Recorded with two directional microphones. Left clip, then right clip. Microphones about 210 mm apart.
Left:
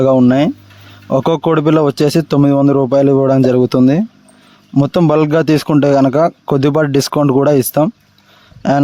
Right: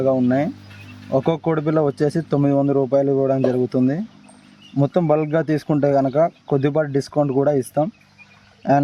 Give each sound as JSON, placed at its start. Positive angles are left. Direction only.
{"t": 0.0, "sound": "a man's voice", "side_deg": 40}